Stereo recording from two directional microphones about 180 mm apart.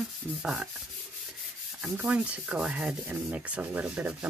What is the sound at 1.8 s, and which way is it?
Speech, 5° right (ahead or behind).